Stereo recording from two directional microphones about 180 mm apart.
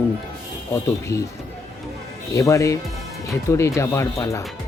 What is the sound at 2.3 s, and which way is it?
Speech, 15° left (ahead or behind).